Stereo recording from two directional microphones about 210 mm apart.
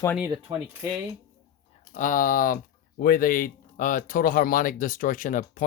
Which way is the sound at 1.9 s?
40° left (ahead or behind).